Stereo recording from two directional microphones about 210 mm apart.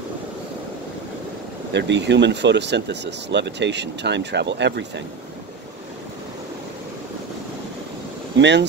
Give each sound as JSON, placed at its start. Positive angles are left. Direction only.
{"t": 1.7, "sound": "speech", "side_deg": -55}
{"t": 8.4, "sound": "speech", "side_deg": -55}